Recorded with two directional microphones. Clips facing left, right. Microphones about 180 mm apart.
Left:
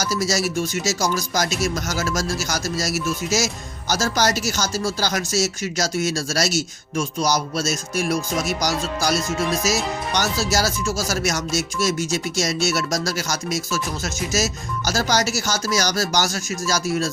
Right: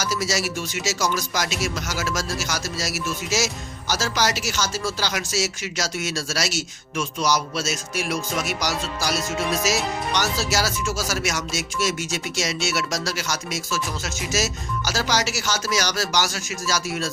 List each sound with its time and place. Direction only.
0.0 s speech: 40° left (ahead or behind)